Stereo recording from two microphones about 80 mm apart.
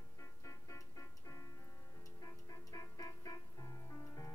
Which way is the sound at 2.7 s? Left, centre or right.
Left.